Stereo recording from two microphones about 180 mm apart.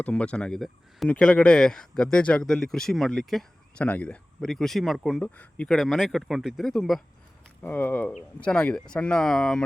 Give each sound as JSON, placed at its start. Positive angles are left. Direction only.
{"t": 0.0, "sound": "speech", "side_deg": 5}